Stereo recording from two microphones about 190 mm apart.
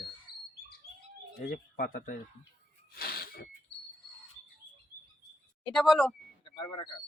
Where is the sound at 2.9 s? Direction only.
55° left (ahead or behind).